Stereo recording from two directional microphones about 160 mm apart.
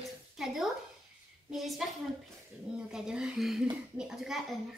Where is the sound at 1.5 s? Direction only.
Centre (ahead or behind).